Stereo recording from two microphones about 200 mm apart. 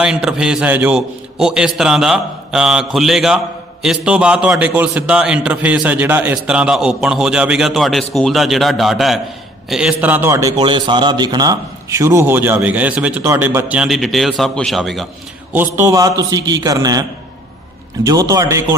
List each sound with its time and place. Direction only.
0.0 s a man's voice: 5° right (ahead or behind)
15.5 s a man's voice: 10° right (ahead or behind)